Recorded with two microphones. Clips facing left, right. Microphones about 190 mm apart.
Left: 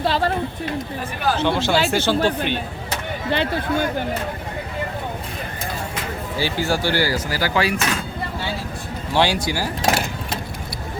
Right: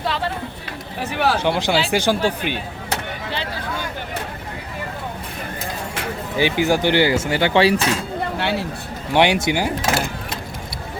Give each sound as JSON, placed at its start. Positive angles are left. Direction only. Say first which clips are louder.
{"t": 0.0, "sound": "a sound", "louder": "left 4 dB", "side_deg": 35}
{"t": 1.1, "sound": "speech", "louder": "right 3 dB", "side_deg": -80}
{"t": 1.4, "sound": "speech", "louder": "even", "side_deg": -15}
{"t": 3.3, "sound": "speech", "louder": "left 8 dB", "side_deg": 55}
{"t": 6.3, "sound": "speech", "louder": "right 5 dB", "side_deg": -20}
{"t": 8.4, "sound": "speech", "louder": "right 6 dB", "side_deg": -70}
{"t": 9.1, "sound": "speech", "louder": "right 3 dB", "side_deg": -20}